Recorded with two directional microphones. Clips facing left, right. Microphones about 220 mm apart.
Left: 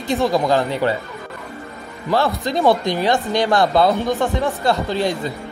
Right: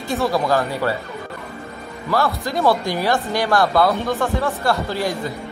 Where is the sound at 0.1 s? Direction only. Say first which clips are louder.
Left 2 dB; 15° left (ahead or behind).